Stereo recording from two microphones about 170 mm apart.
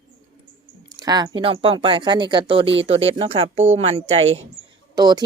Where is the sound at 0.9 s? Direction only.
25° right (ahead or behind).